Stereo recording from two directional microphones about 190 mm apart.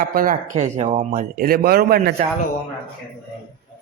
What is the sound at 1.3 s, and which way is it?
Speech, 50° right (ahead or behind).